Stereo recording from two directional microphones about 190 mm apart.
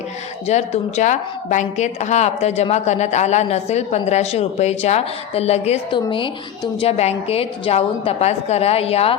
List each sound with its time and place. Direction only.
0.4 s a woman's voice: 35° left (ahead or behind)